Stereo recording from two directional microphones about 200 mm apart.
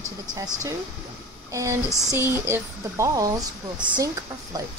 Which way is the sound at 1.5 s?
15° right (ahead or behind).